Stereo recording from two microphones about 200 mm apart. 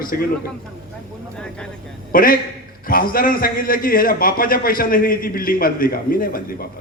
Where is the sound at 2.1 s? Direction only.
45° left (ahead or behind).